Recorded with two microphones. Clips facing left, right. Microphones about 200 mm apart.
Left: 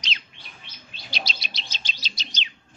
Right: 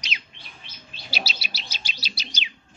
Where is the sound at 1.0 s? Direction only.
5° right (ahead or behind).